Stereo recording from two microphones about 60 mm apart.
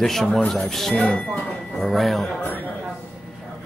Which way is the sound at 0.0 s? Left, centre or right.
Centre.